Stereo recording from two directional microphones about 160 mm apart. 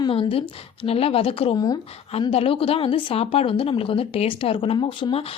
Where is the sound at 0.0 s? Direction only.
35° left (ahead or behind).